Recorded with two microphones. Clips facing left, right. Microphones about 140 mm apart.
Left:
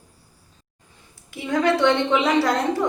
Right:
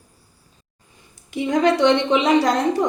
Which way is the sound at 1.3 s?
20° right (ahead or behind).